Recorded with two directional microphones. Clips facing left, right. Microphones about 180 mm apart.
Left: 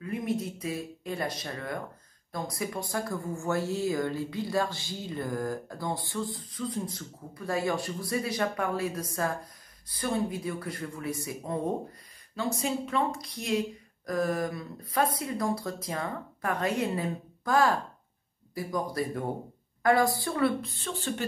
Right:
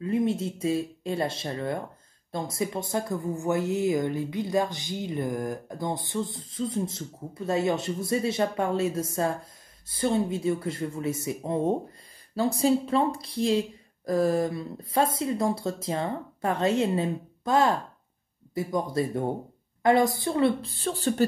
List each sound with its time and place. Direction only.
0.0 s speech: 25° right (ahead or behind)